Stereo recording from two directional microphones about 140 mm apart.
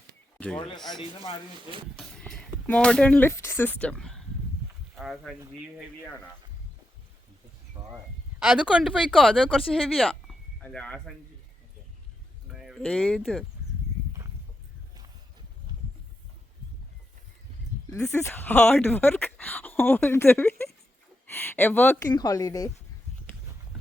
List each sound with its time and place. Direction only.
0.3 s a sound: 10° left (ahead or behind)
0.9 s speech: 35° left (ahead or behind)
2.0 s speech: centre (ahead or behind)
7.8 s a sound: 30° right (ahead or behind)
8.4 s speech: 5° right (ahead or behind)
12.5 s a sound: centre (ahead or behind)
12.8 s speech: 5° left (ahead or behind)
18.1 s speech: 15° left (ahead or behind)
22.1 s speech: 25° left (ahead or behind)